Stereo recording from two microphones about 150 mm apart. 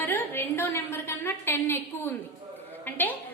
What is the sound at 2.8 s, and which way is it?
Speech, 15° left (ahead or behind).